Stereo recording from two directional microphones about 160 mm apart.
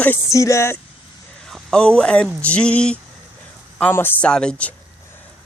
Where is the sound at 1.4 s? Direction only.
Centre (ahead or behind).